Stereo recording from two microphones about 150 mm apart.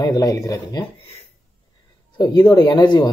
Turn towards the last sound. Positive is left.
turn(degrees=30)  # may be behind; listen again after turning